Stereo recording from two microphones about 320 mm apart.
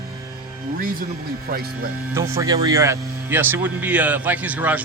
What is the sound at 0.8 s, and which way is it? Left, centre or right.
Speech, right.